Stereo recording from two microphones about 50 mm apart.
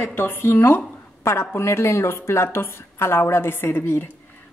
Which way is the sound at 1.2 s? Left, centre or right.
Left.